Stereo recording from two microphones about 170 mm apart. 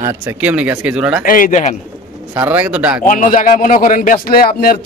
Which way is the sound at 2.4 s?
10° right (ahead or behind).